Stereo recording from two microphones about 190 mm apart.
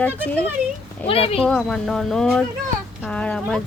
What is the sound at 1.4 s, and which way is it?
Speech, centre (ahead or behind).